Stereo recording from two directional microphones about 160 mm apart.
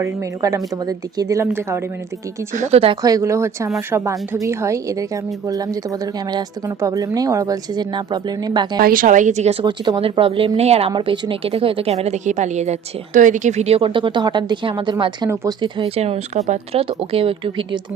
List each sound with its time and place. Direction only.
0.0 s a woman's voice: 20° right (ahead or behind)
2.5 s a woman's voice: 50° right (ahead or behind)
3.0 s a woman's voice: 20° right (ahead or behind)
8.8 s a woman's voice: 60° right (ahead or behind); by 15.9 s 25° right (ahead or behind)
16.0 s a woman's voice: 40° right (ahead or behind)